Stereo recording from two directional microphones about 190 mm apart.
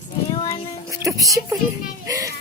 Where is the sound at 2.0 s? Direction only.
15° right (ahead or behind).